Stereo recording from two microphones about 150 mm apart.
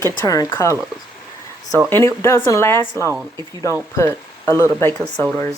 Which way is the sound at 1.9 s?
20° left (ahead or behind).